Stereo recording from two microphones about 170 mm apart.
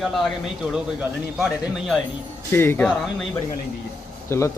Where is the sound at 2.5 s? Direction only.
15° left (ahead or behind).